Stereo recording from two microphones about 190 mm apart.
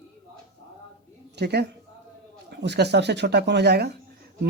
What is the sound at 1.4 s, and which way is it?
A woman's voice, 60° right (ahead or behind).